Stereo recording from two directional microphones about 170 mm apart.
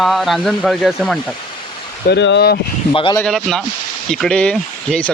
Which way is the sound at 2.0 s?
90° left.